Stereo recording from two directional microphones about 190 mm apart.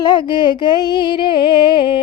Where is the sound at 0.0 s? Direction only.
25° left (ahead or behind).